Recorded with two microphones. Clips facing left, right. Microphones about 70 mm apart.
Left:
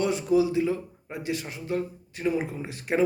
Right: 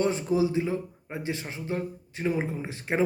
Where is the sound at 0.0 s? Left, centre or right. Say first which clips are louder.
Left 2 dB; right.